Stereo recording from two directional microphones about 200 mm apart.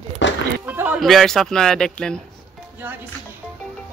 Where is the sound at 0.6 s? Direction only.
10° right (ahead or behind).